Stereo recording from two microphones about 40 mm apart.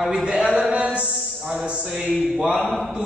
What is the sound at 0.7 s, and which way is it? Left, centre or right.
Music, right.